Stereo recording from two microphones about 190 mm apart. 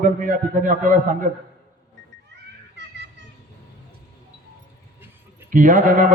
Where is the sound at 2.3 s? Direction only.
70° right (ahead or behind).